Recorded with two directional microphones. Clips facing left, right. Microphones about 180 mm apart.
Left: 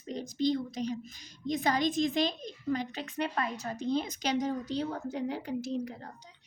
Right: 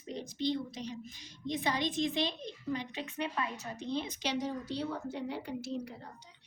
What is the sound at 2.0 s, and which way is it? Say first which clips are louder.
Speech: left 4 dB; 90° left.